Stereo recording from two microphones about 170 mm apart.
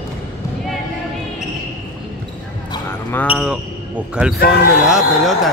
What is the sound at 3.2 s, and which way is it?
Speech, 5° right (ahead or behind).